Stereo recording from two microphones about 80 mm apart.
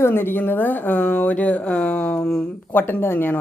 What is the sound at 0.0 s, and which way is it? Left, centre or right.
Speech, left.